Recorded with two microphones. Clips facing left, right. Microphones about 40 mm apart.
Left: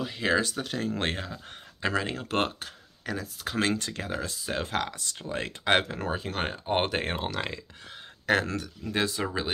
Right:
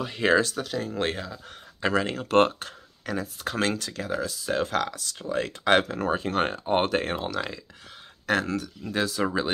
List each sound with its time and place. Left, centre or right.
0.0 s speech: centre
0.7 s speech: left
2.0 s speech: centre
3.7 s speech: left
4.5 s speech: centre
6.0 s speech: centre
6.7 s speech: centre
9.2 s speech: centre